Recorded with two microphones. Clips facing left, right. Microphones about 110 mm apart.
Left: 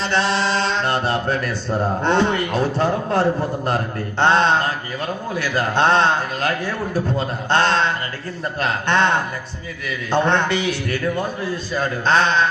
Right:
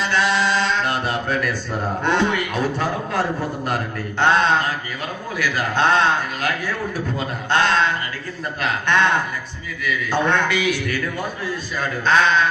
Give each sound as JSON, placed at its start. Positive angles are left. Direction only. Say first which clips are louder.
{"t": 0.0, "sound": "mantra", "louder": "even", "side_deg": 30}
{"t": 2.0, "sound": "a man's voice", "louder": "left 1 dB", "side_deg": 35}